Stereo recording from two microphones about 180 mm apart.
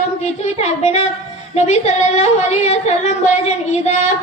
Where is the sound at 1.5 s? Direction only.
35° left (ahead or behind).